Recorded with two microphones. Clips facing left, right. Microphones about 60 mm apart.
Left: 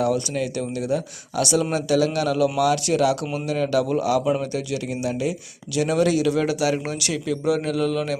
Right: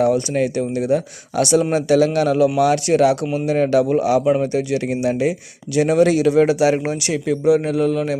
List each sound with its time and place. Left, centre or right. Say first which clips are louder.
0.0 s speech: right 6 dB; right; by 8.2 s centre